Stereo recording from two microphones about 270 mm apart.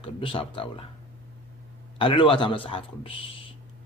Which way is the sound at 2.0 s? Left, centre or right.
Centre.